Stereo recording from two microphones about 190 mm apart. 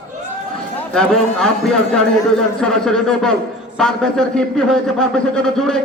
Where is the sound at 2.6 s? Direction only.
5° left (ahead or behind).